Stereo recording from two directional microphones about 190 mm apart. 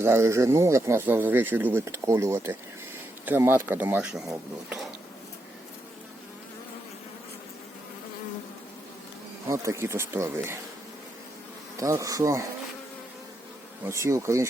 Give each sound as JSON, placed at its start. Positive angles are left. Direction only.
{"t": 0.0, "sound": "speech", "side_deg": -15}
{"t": 9.5, "sound": "speech", "side_deg": -15}
{"t": 11.8, "sound": "speech", "side_deg": -15}
{"t": 14.0, "sound": "speech", "side_deg": -15}